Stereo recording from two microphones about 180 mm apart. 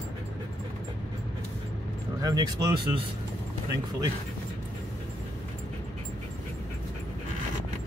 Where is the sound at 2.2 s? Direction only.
20° right (ahead or behind).